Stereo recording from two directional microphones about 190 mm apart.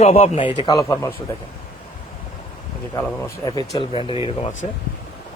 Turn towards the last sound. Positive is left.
turn(degrees=30)  # may be behind; listen again after turning